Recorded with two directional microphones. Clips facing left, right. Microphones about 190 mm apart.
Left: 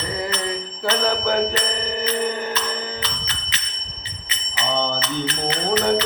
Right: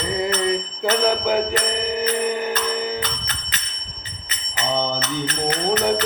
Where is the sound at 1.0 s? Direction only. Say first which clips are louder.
Right 1 dB; 10° right (ahead or behind).